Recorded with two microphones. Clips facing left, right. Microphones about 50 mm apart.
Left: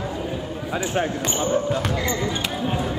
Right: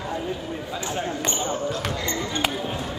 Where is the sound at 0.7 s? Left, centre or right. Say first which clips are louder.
Left 6 dB; left.